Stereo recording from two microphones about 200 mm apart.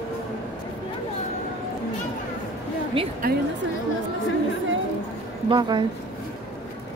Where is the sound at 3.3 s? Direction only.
50° right (ahead or behind).